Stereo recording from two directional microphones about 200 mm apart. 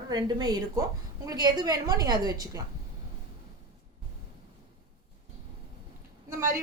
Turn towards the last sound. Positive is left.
turn(degrees=-10)  # may be behind; listen again after turning